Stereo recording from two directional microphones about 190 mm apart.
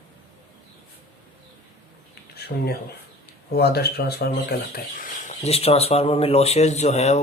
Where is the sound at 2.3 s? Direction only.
55° left (ahead or behind).